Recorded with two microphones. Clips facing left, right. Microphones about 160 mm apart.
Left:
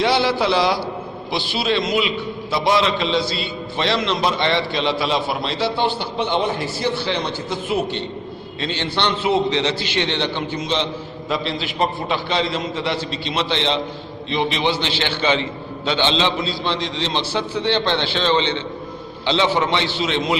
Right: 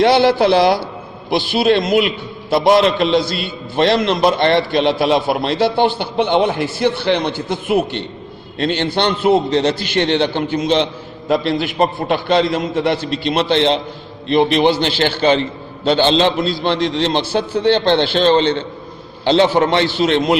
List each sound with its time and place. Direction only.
0.0 s a man's voice: 55° right (ahead or behind)